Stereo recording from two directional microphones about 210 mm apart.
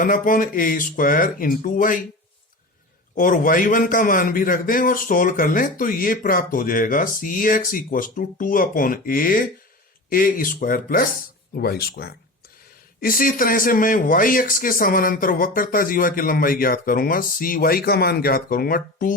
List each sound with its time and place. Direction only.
0.0 s a man's voice: 40° left (ahead or behind)
3.2 s a man's voice: 40° left (ahead or behind)